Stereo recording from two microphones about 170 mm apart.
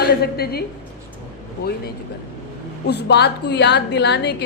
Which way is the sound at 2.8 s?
80° left.